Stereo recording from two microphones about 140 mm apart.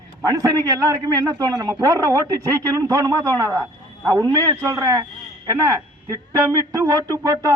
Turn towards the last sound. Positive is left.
turn(degrees=-25)  # may be behind; listen again after turning